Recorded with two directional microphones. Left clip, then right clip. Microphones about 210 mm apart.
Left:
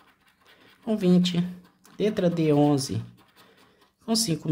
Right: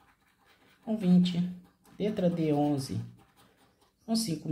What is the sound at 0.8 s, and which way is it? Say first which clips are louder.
Speech: left 6 dB; 30° left (ahead or behind).